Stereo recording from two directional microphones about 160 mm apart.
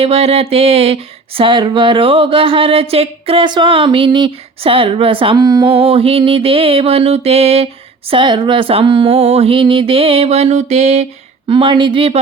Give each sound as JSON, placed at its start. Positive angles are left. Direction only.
{"t": 0.0, "sound": "music", "side_deg": -40}
{"t": 5.7, "sound": "music", "side_deg": -35}
{"t": 11.4, "sound": "music", "side_deg": -30}